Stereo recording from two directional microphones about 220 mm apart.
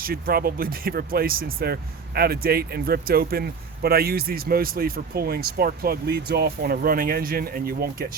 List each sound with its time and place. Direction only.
0.0 s speech: 45° right (ahead or behind)